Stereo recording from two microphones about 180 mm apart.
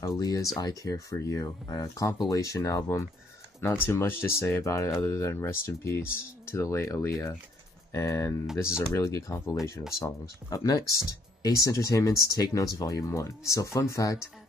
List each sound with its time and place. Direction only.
0.0 s speech: 20° left (ahead or behind)